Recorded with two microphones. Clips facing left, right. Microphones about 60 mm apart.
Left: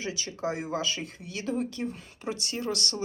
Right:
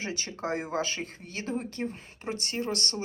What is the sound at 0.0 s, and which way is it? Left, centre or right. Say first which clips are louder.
Speech: left 2 dB; right.